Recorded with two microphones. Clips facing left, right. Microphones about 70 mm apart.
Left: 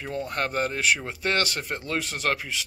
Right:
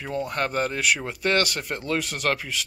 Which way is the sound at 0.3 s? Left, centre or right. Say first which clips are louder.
Even; left.